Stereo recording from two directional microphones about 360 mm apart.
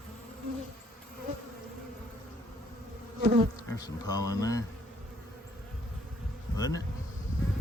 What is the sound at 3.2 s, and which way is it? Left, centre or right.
Bee, centre.